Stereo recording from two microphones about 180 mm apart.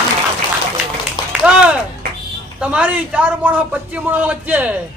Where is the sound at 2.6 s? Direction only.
5° right (ahead or behind).